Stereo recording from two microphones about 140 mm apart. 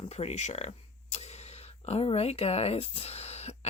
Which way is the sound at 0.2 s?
50° left (ahead or behind).